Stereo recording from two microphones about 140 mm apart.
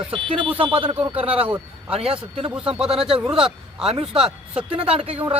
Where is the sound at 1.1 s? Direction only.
10° right (ahead or behind).